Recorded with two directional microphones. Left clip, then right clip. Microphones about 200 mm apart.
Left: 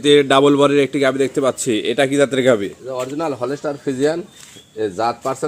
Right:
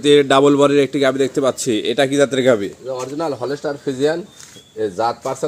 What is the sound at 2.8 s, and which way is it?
A man's voice, 20° left (ahead or behind).